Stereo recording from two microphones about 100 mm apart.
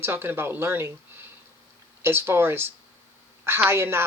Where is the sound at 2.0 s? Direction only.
25° right (ahead or behind).